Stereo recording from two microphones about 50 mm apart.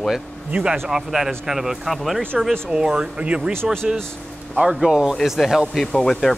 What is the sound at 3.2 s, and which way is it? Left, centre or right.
Speech, right.